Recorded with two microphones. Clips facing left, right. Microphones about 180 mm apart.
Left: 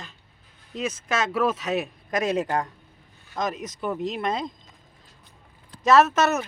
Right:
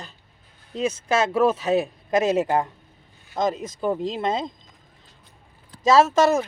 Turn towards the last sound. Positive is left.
turn(degrees=-25)  # may be behind; listen again after turning